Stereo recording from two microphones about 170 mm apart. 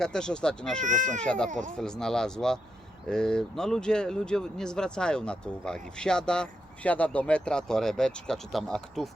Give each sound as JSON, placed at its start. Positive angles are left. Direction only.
{"t": 0.0, "sound": "speech", "side_deg": 5}
{"t": 0.8, "sound": "speech", "side_deg": -45}
{"t": 1.2, "sound": "speech", "side_deg": 5}
{"t": 1.5, "sound": "speech", "side_deg": -50}
{"t": 1.8, "sound": "speech", "side_deg": 5}